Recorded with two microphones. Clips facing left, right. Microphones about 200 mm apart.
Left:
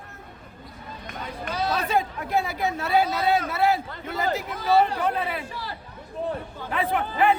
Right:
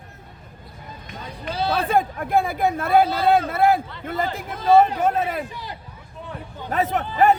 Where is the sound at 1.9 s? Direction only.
50° right (ahead or behind).